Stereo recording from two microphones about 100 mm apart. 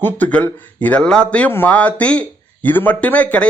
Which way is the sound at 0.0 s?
15° left (ahead or behind).